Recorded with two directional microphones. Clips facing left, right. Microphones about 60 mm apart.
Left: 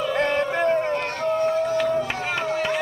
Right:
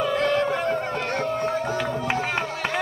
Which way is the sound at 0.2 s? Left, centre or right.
Left.